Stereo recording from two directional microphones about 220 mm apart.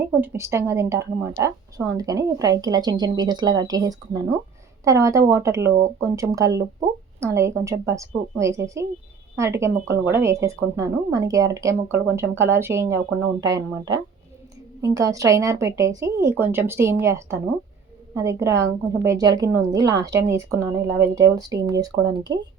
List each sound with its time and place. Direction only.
0.0 s a woman's voice: 10° right (ahead or behind)